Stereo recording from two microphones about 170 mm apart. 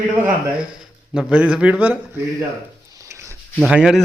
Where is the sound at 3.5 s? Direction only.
5° right (ahead or behind).